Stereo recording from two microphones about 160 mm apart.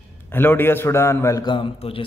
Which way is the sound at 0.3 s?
15° left (ahead or behind).